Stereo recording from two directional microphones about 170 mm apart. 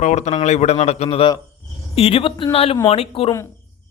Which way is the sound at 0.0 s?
45° left (ahead or behind).